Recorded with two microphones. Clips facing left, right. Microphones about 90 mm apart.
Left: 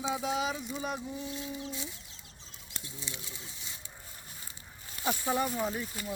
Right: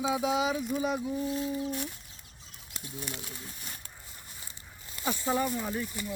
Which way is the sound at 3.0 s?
60° right (ahead or behind).